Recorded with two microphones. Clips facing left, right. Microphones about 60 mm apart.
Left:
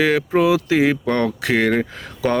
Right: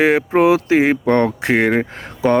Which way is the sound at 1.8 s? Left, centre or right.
Centre.